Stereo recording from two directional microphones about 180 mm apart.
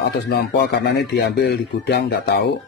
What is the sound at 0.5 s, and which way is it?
Speech, 60° left (ahead or behind).